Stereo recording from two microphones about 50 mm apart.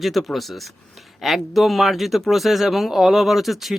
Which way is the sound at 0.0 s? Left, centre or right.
Centre.